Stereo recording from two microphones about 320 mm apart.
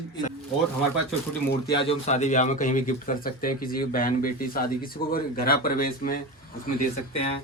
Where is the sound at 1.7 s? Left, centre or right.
Centre.